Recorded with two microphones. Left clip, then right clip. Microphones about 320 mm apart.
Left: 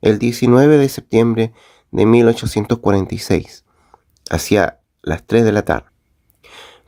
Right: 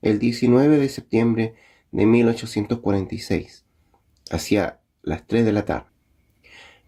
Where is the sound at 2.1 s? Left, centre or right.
Left.